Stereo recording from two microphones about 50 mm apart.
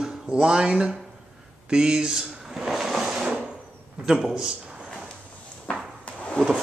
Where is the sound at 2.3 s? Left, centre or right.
Centre.